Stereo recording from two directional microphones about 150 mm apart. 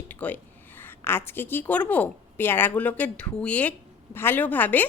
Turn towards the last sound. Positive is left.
turn(degrees=10)  # may be behind; listen again after turning